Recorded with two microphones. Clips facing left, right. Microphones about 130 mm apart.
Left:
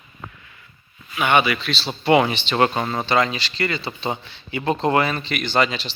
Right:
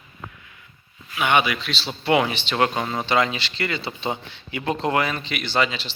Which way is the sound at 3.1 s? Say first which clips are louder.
Even; 15° right (ahead or behind).